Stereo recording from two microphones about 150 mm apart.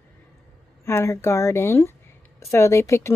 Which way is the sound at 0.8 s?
20° left (ahead or behind).